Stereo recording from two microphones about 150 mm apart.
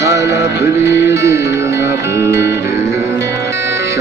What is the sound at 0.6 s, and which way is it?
Music, 20° right (ahead or behind).